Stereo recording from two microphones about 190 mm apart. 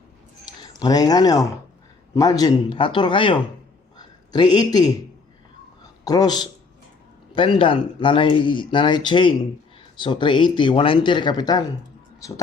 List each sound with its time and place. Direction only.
0.6 s speech: 20° left (ahead or behind)
3.9 s a sound: 20° left (ahead or behind)
6.1 s speech: 20° left (ahead or behind)